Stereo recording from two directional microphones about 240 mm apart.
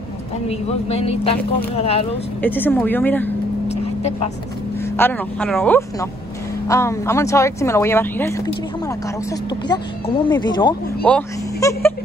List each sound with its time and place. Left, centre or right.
0.5 s speech: left
2.4 s speech: centre
3.6 s vehicle: left
4.9 s speech: centre